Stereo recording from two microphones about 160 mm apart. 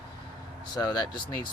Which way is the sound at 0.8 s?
25° left (ahead or behind).